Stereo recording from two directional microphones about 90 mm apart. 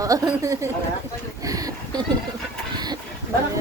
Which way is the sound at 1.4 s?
40° right (ahead or behind).